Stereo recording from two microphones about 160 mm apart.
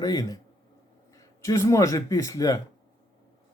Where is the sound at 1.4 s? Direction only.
20° left (ahead or behind).